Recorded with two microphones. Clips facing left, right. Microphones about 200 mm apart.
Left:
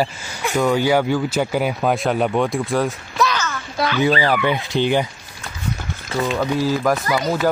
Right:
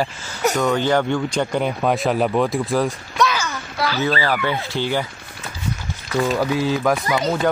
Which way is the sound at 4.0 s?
15° left (ahead or behind).